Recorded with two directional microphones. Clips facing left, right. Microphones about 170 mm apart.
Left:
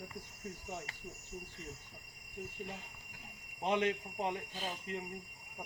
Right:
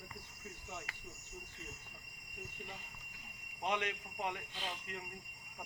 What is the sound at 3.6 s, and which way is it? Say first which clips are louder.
Speech: left 5 dB; 30° left (ahead or behind).